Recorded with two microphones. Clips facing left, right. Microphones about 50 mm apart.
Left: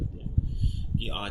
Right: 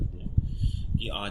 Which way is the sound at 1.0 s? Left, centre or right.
Centre.